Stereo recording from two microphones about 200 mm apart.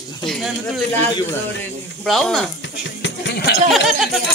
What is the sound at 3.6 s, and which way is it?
Speech, centre (ahead or behind).